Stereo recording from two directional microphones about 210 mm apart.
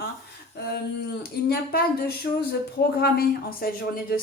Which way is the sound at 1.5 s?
50° left (ahead or behind).